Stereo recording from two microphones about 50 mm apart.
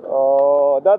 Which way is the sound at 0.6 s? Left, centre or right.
Left.